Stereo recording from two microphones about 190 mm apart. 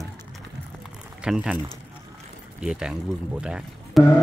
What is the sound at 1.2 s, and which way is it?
Speech, 5° right (ahead or behind).